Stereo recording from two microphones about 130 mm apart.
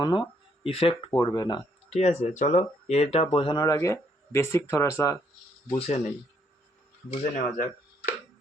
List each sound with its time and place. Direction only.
0.0 s speech: 35° left (ahead or behind)
1.1 s speech: 30° left (ahead or behind)
1.9 s speech: 60° left (ahead or behind)
3.3 s speech: 40° left (ahead or behind)
3.8 s speech: 20° left (ahead or behind)
5.7 s speech: 50° left (ahead or behind)
7.3 s speech: 75° left (ahead or behind)